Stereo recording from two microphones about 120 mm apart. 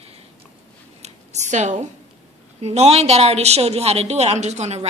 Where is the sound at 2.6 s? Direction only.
60° right (ahead or behind).